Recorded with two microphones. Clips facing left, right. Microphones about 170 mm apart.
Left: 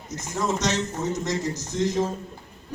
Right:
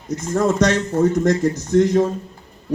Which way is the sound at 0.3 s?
55° right (ahead or behind).